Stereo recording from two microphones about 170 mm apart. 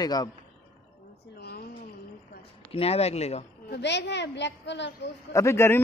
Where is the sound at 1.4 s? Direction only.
70° left (ahead or behind).